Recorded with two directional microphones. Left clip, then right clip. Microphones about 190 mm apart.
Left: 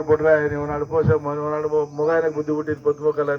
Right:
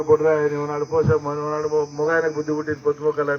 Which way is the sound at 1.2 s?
20° right (ahead or behind).